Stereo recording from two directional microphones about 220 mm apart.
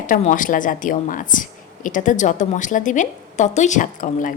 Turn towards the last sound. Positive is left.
turn(degrees=35)  # may be behind; listen again after turning